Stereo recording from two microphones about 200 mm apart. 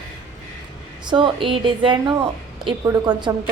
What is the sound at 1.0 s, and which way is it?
A woman's voice, 25° right (ahead or behind).